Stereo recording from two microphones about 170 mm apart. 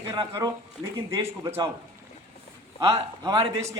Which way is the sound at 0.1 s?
20° right (ahead or behind).